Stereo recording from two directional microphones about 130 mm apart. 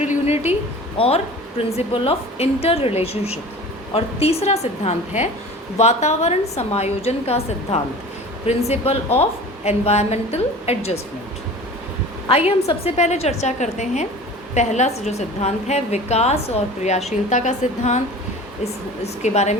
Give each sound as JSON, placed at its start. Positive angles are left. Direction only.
{"t": 0.0, "sound": "a sound", "side_deg": 65}
{"t": 0.9, "sound": "a woman's voice", "side_deg": 50}
{"t": 12.3, "sound": "a woman's voice", "side_deg": 50}
{"t": 18.6, "sound": "a woman's voice", "side_deg": 55}